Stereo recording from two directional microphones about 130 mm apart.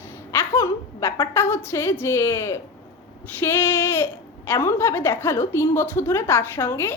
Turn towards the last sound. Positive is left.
turn(degrees=15)  # may be behind; listen again after turning